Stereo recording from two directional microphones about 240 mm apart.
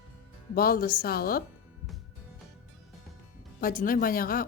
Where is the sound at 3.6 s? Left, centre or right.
Left.